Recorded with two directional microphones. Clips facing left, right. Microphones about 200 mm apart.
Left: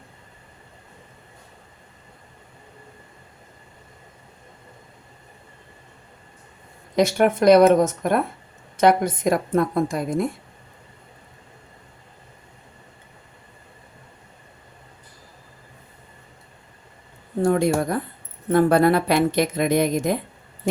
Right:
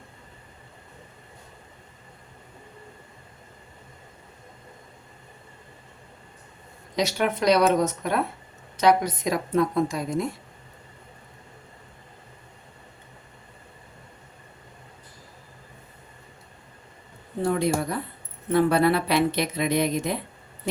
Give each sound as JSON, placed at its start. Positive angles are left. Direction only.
{"t": 6.9, "sound": "a woman's voice", "side_deg": 50}
{"t": 17.4, "sound": "a woman's voice", "side_deg": 45}